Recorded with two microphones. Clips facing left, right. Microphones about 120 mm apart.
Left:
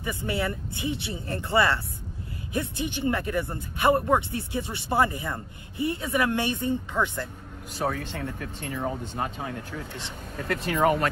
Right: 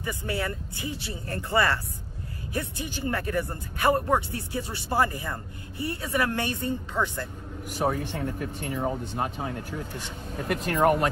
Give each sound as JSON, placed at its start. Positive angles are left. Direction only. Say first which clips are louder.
{"t": 0.2, "sound": "a woman's voice", "louder": "left 3 dB", "side_deg": 20}
{"t": 7.7, "sound": "speech", "louder": "right 2 dB", "side_deg": -15}
{"t": 10.6, "sound": "speech", "louder": "right 1 dB", "side_deg": 0}